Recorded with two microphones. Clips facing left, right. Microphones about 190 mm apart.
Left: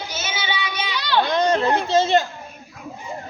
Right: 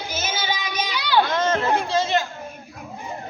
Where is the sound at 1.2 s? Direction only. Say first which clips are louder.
Left 3 dB; 15° left (ahead or behind).